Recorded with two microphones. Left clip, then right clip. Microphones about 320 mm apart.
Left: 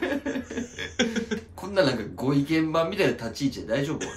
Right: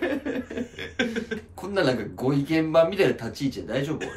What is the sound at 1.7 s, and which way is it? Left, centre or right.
Speech, centre.